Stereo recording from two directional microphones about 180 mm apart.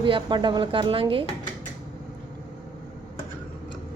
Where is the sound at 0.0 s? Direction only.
25° right (ahead or behind).